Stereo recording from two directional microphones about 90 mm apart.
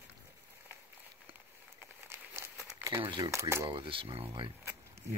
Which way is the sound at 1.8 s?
25° right (ahead or behind).